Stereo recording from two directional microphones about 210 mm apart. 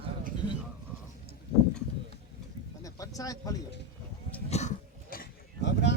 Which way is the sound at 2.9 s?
15° left (ahead or behind).